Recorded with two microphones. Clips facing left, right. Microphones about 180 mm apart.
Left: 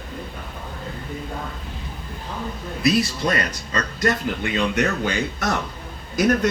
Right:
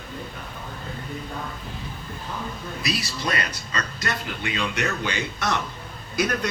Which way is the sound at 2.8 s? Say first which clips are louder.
Left 9 dB; 45° left (ahead or behind).